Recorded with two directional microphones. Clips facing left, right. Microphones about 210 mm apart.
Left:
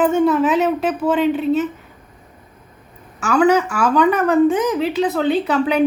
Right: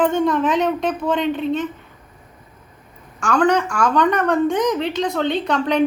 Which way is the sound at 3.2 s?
5° left (ahead or behind).